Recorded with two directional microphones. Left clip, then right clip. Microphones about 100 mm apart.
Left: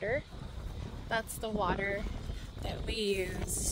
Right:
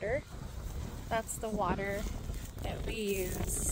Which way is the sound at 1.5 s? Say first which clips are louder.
Left 1 dB; 80° left.